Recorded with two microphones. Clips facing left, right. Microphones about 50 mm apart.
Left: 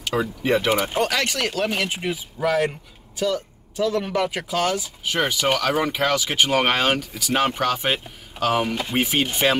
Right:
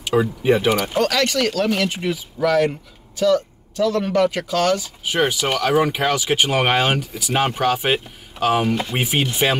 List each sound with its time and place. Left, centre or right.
0.0 s speech: centre
0.7 s speech: centre
3.7 s speech: centre
5.0 s speech: centre